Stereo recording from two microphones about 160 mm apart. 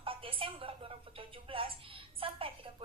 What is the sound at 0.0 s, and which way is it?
A woman's voice, 35° right (ahead or behind).